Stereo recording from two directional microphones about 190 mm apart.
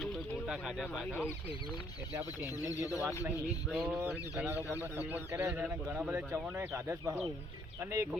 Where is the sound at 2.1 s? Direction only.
10° right (ahead or behind).